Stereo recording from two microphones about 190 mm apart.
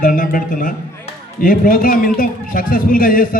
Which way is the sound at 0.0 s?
45° left (ahead or behind).